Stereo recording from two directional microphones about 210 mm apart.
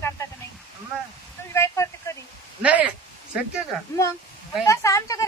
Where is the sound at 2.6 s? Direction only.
5° right (ahead or behind).